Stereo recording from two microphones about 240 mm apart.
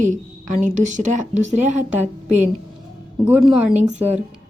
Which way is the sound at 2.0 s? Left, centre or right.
Centre.